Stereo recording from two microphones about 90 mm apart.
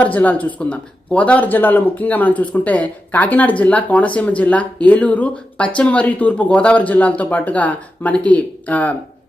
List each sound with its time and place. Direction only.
0.0 s speech: 20° left (ahead or behind)